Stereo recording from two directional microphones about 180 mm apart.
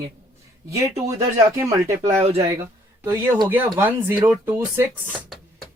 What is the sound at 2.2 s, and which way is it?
Speech, 35° right (ahead or behind).